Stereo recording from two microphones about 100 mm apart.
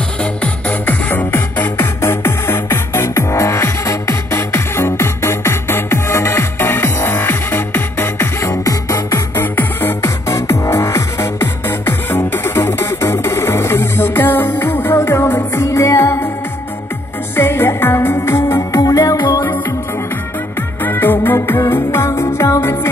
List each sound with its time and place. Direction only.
0.2 s music: 15° left (ahead or behind); by 9.2 s 30° left (ahead or behind)
9.4 s music: 20° left (ahead or behind)
17.4 s music: 25° left (ahead or behind)
18.8 s music: 35° left (ahead or behind)
20.8 s music: 20° left (ahead or behind)